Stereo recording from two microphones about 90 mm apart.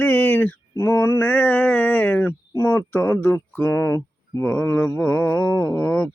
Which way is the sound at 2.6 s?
20° left (ahead or behind).